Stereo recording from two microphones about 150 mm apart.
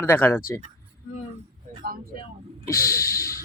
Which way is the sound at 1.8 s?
90° right.